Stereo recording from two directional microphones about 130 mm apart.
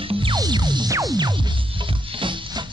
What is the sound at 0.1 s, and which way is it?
Music, 40° right (ahead or behind).